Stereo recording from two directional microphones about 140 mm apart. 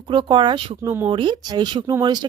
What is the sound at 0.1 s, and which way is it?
Speech, 35° right (ahead or behind).